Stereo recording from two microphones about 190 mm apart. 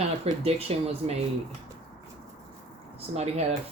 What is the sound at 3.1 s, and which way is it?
Speech, 35° right (ahead or behind).